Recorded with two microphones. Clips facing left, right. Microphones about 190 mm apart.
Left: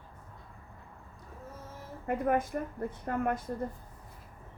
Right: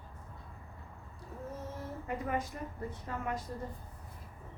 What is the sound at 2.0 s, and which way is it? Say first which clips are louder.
A woman's voice: left 8 dB; 55° left (ahead or behind).